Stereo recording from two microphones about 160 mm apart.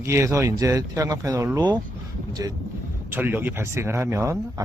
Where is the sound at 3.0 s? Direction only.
15° right (ahead or behind).